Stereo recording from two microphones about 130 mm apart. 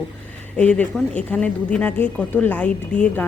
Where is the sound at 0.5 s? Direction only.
10° left (ahead or behind).